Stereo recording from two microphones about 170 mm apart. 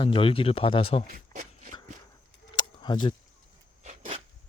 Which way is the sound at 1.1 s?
50° right (ahead or behind).